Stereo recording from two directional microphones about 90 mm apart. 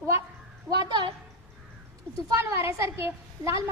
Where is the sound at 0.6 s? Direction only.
60° right (ahead or behind).